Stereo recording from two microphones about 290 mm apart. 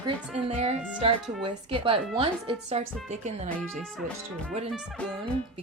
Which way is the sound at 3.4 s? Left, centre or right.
Centre.